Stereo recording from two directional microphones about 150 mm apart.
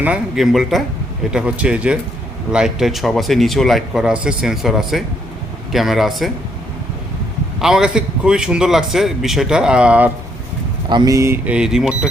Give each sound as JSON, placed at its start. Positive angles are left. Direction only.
{"t": 0.0, "sound": "speech", "side_deg": -5}
{"t": 7.6, "sound": "speech", "side_deg": -5}
{"t": 10.8, "sound": "speech", "side_deg": -30}
{"t": 11.5, "sound": "speech", "side_deg": -5}